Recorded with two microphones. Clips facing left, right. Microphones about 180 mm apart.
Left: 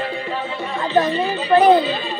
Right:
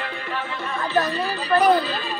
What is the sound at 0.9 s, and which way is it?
Chatter, 20° left (ahead or behind).